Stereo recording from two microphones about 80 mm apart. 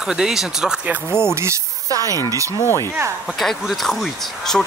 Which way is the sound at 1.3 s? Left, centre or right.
Right.